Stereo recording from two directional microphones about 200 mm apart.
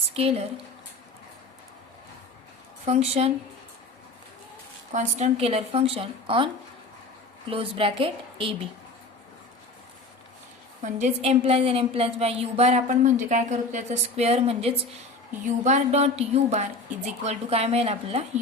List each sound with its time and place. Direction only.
0.1 s a woman's voice: 30° right (ahead or behind)
2.8 s a woman's voice: 35° right (ahead or behind)
4.9 s a woman's voice: 35° right (ahead or behind)
7.5 s a woman's voice: 25° right (ahead or behind)
10.8 s a woman's voice: 35° right (ahead or behind)